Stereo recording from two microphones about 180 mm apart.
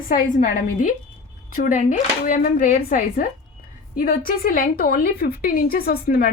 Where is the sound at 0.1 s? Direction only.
50° left (ahead or behind).